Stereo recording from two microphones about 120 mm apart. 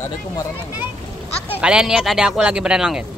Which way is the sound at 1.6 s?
5° right (ahead or behind).